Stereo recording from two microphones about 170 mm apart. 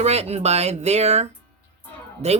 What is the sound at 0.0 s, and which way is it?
Speech, 40° right (ahead or behind).